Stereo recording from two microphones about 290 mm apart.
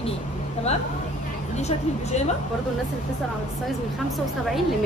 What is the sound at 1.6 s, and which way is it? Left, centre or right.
Speech, left.